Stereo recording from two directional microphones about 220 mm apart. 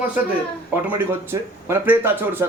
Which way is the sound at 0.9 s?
10° right (ahead or behind).